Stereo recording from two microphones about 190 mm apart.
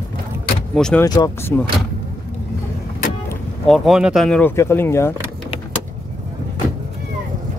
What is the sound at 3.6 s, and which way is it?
Speech, centre (ahead or behind).